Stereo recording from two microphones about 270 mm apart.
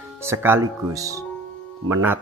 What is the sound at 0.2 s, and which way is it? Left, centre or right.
Speech, centre.